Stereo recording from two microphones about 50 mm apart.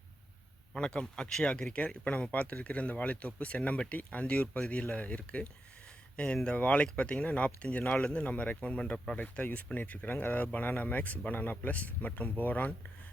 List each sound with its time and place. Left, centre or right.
0.7 s speech: centre; by 12.7 s left